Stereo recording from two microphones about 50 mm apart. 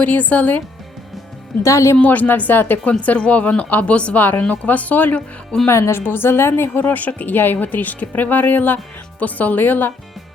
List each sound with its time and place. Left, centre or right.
0.0 s speech: left
1.6 s a woman's voice: left
2.0 s speech: left
3.0 s speech: left
5.6 s speech: left
6.0 s a woman's voice: left
6.8 s speech: left